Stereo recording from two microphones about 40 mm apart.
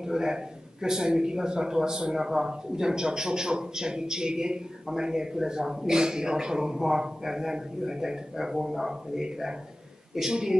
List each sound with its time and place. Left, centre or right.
0.0 s a man's voice: centre